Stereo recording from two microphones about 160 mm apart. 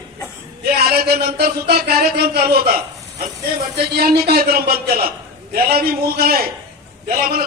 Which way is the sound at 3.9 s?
75° right (ahead or behind).